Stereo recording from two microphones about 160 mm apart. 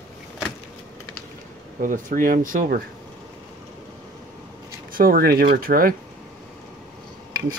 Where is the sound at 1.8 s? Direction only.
60° right (ahead or behind).